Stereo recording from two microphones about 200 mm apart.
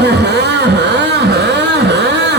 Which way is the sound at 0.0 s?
55° right (ahead or behind).